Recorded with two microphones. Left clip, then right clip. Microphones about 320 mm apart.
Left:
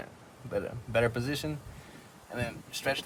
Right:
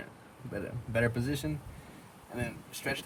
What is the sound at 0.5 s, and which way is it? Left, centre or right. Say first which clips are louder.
Speech: left 4 dB; centre.